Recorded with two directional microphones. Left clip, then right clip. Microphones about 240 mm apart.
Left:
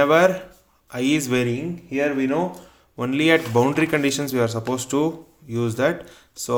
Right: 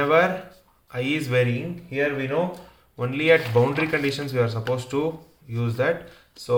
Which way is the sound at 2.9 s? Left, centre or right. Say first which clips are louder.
Left 1 dB; left.